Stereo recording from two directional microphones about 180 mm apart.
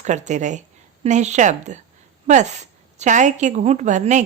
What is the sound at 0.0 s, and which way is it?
A woman's voice, 40° right (ahead or behind).